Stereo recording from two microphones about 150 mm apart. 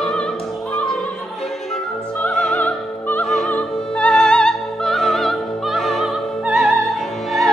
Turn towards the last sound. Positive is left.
turn(degrees=0)  # may be behind; listen again after turning